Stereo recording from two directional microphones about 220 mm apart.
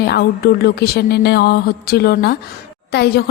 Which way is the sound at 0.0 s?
45° left (ahead or behind).